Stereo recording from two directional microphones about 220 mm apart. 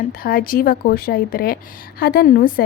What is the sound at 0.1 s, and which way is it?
A woman's voice, 40° left (ahead or behind).